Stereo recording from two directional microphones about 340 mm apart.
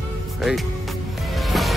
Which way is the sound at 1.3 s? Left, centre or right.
Centre.